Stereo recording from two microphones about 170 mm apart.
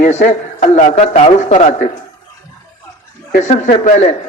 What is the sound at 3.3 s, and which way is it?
Speech, 45° left (ahead or behind).